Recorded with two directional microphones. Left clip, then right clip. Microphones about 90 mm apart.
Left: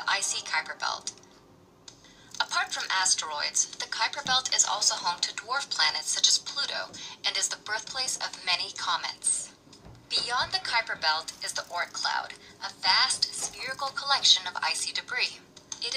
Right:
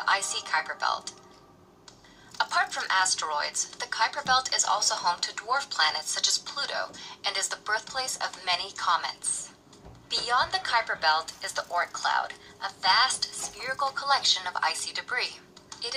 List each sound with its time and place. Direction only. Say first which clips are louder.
0.0 s speech: right 2 dB; 35° right (ahead or behind)
2.3 s speech: right 2 dB; 35° right (ahead or behind)